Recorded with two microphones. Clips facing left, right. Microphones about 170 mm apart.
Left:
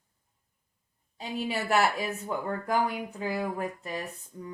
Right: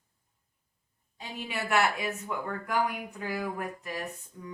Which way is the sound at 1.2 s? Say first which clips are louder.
Left 5 dB; 35° left (ahead or behind).